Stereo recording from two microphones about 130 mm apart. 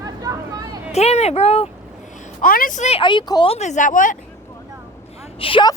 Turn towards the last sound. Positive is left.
turn(degrees=45)  # may be behind; listen again after turning